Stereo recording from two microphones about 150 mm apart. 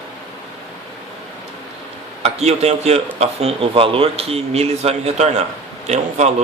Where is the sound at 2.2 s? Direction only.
45° right (ahead or behind).